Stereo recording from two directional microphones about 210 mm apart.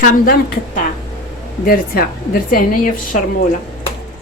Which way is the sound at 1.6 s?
45° left (ahead or behind).